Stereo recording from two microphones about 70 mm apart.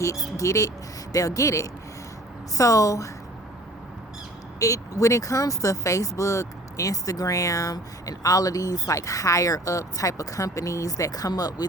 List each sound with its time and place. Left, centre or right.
0.3 s speech: left
4.6 s speech: left